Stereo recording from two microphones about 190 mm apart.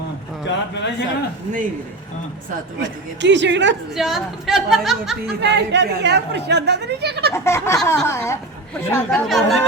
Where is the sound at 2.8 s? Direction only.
70° right (ahead or behind).